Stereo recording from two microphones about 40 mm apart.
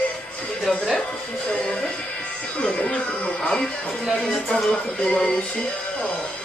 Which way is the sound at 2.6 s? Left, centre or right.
Left.